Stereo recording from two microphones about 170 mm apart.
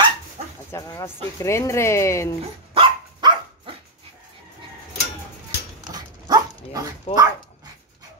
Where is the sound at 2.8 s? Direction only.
30° right (ahead or behind).